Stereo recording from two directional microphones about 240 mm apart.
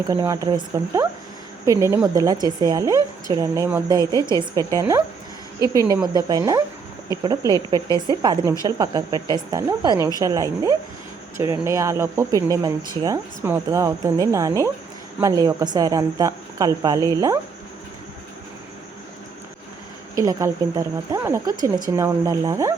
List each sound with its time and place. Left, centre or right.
0.1 s speech: centre
7.9 s speech: centre
8.2 s speech: centre
20.1 s speech: centre